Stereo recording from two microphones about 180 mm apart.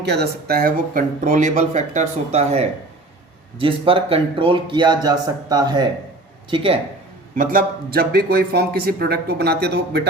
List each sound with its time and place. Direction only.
0.0 s a man's voice: 65° right (ahead or behind); by 6.7 s 30° right (ahead or behind)
7.3 s speech: 55° right (ahead or behind)